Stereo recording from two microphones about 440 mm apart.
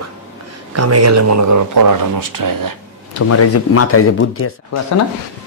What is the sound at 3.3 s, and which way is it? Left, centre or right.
Speech, left.